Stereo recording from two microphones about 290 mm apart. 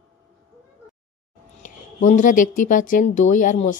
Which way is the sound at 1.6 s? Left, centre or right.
Left.